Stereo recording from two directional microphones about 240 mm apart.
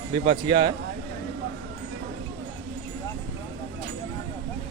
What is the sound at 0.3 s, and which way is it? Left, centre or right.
Speech, right.